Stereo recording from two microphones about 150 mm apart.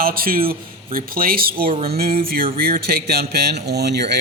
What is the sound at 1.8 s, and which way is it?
Music, 90° right.